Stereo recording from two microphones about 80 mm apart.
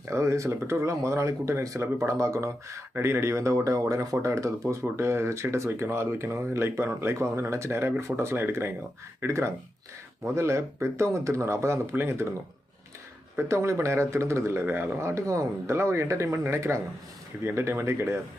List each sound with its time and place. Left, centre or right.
0.1 s speech: right
13.5 s speech: right
15.1 s speech: right